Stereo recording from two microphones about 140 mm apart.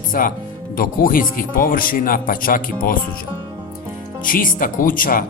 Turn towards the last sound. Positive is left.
turn(degrees=80)